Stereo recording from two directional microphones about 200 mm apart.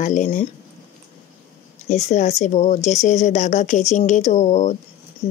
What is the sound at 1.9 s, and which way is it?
Speech, 35° left (ahead or behind).